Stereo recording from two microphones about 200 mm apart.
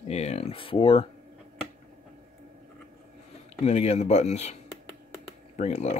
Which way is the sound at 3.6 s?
30° left (ahead or behind).